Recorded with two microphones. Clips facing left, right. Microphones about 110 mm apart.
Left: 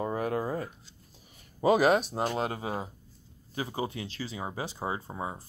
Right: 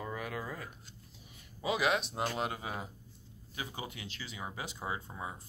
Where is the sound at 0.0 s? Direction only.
40° left (ahead or behind).